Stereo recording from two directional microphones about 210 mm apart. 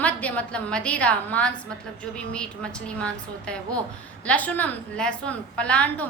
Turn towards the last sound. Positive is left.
turn(degrees=5)  # may be behind; listen again after turning